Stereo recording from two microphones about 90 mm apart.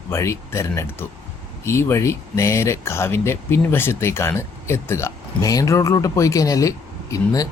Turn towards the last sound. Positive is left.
turn(degrees=40)  # may be behind; listen again after turning